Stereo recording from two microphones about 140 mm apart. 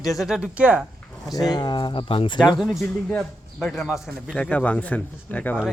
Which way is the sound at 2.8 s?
15° left (ahead or behind).